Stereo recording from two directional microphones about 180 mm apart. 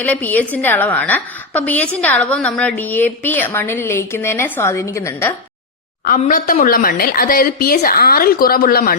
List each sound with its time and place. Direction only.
0.0 s a woman's voice: 10° left (ahead or behind)
6.1 s a woman's voice: 50° left (ahead or behind)